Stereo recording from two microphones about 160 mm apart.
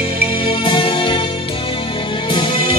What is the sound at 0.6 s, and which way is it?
Music, 30° left (ahead or behind).